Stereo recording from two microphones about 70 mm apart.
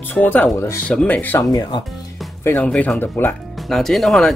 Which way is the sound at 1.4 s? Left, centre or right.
Left.